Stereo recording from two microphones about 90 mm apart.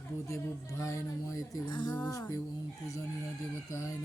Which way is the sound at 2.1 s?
40° left (ahead or behind).